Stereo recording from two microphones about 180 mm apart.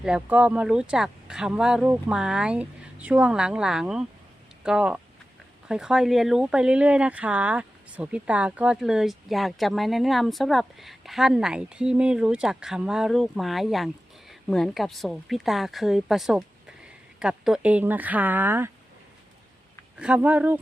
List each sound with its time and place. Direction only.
0.0 s speech: 5° right (ahead or behind)
20.0 s speech: 5° right (ahead or behind)